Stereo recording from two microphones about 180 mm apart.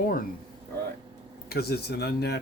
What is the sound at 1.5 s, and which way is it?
Speech, 60° left (ahead or behind).